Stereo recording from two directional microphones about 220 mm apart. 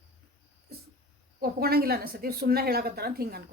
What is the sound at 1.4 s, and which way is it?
A woman's voice, 45° right (ahead or behind).